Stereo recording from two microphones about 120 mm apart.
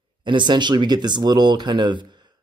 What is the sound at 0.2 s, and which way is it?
Speech, 40° right (ahead or behind).